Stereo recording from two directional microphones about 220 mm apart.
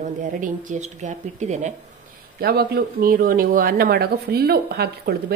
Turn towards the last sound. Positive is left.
turn(degrees=-45)  # may be behind; listen again after turning